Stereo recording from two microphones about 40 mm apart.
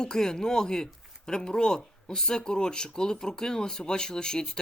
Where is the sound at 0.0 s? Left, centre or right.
Centre.